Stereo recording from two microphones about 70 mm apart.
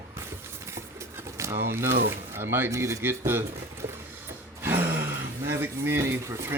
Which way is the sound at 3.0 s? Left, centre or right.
Right.